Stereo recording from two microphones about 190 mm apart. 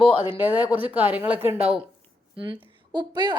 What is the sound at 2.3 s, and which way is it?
A woman's voice, 25° right (ahead or behind).